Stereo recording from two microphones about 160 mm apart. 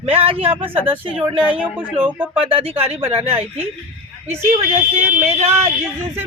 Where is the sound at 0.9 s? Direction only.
10° right (ahead or behind).